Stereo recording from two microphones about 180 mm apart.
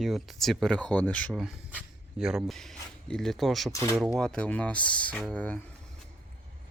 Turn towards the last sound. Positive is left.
turn(degrees=5)  # may be behind; listen again after turning